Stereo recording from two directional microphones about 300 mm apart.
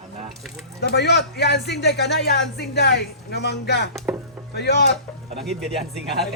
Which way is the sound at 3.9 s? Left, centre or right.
Centre.